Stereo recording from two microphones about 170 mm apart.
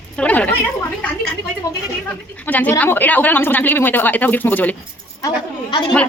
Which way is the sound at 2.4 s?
10° left (ahead or behind).